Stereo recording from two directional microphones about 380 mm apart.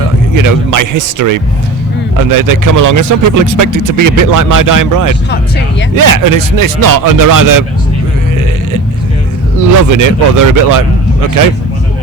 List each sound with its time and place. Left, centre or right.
0.3 s speech: right
9.6 s speech: right